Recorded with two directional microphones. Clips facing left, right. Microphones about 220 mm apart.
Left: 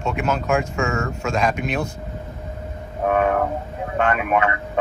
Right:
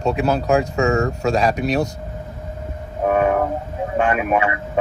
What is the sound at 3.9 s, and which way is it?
Speech, 15° right (ahead or behind).